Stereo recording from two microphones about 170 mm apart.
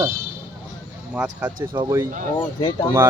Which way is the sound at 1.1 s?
10° right (ahead or behind).